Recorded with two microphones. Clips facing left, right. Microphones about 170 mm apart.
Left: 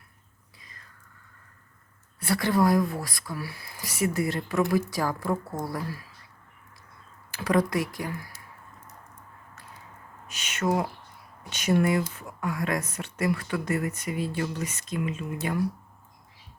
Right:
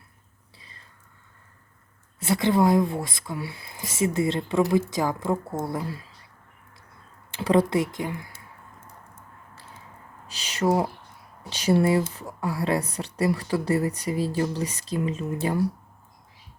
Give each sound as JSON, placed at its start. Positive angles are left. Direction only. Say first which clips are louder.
{"t": 0.6, "sound": "whispering", "louder": "even", "side_deg": -30}
{"t": 2.1, "sound": "speech", "louder": "right 3 dB", "side_deg": -20}
{"t": 7.3, "sound": "speech", "louder": "right 3 dB", "side_deg": -25}
{"t": 10.2, "sound": "speech", "louder": "right 4 dB", "side_deg": -35}